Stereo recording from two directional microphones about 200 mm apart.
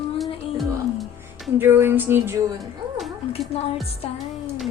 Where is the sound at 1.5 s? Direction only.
10° right (ahead or behind).